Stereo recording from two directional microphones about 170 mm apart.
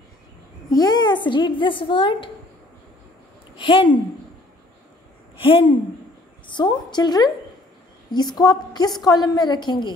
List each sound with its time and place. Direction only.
0.7 s a woman's voice: 20° left (ahead or behind)
3.5 s a woman's voice: 30° left (ahead or behind)
5.4 s a woman's voice: 30° left (ahead or behind)